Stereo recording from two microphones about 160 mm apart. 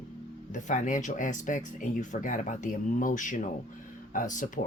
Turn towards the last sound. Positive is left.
turn(degrees=50)  # may be behind; listen again after turning